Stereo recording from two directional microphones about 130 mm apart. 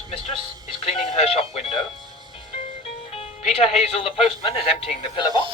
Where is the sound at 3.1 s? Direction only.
50° left (ahead or behind).